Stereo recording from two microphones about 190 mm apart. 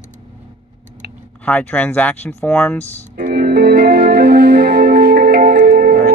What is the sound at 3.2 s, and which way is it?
Music, 55° right (ahead or behind).